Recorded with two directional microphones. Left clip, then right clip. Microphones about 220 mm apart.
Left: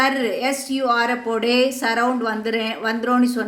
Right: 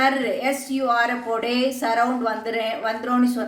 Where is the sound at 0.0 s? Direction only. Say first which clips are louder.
Left 1 dB; 45° left (ahead or behind).